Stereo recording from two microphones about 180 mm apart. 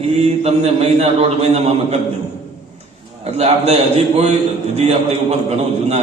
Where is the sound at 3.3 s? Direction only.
35° right (ahead or behind).